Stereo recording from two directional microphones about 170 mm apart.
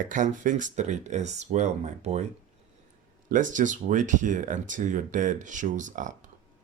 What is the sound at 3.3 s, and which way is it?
Speech, 50° right (ahead or behind).